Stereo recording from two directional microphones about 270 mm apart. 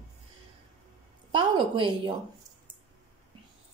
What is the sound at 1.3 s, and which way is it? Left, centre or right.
Speech, centre.